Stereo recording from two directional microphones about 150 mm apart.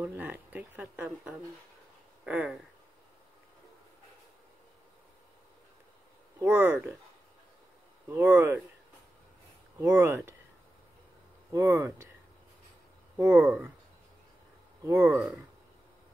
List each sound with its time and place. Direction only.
0.0 s speech: 15° right (ahead or behind)
6.4 s speech: 15° right (ahead or behind)
8.1 s speech: 15° right (ahead or behind)
9.8 s speech: 20° right (ahead or behind)
11.5 s speech: 20° right (ahead or behind)
13.2 s speech: 15° right (ahead or behind)
14.9 s speech: 15° right (ahead or behind)